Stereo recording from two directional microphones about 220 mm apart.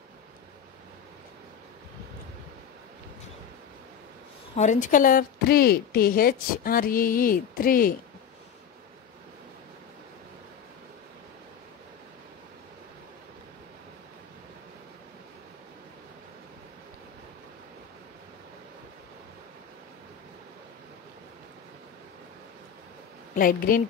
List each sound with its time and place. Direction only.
4.6 s a woman's voice: 35° left (ahead or behind)
23.3 s a woman's voice: 40° left (ahead or behind)